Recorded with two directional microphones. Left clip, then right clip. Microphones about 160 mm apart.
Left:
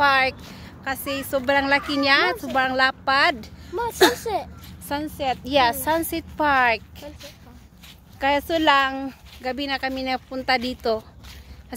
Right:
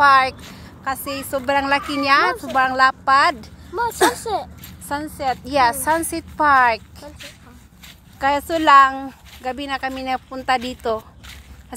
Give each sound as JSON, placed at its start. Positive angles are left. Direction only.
{"t": 0.0, "sound": "a woman's voice", "side_deg": 10}
{"t": 4.0, "sound": "a woman's voice", "side_deg": 25}
{"t": 8.2, "sound": "a woman's voice", "side_deg": 10}